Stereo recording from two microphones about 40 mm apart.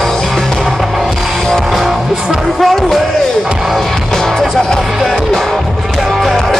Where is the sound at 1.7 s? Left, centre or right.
Centre.